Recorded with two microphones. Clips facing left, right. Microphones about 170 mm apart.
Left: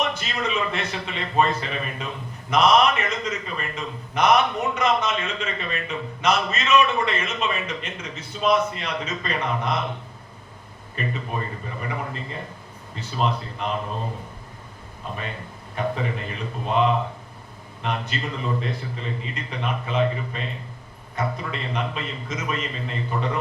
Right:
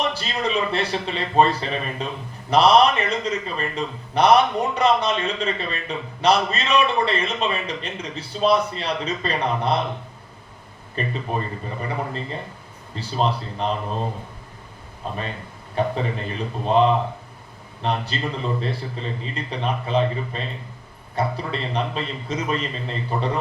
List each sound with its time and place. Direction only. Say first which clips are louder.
0.0 s a man's voice: right 2 dB; 35° right (ahead or behind)
10.9 s a man's voice: right 3 dB; 35° right (ahead or behind)
15.1 s a man's voice: right 3 dB; 35° right (ahead or behind)